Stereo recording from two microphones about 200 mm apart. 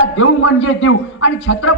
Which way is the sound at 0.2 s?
80° left.